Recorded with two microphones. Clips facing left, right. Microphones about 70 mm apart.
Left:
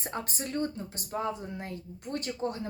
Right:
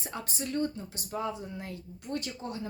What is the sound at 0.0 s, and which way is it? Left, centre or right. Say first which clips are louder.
A woman's voice: left 1 dB; left.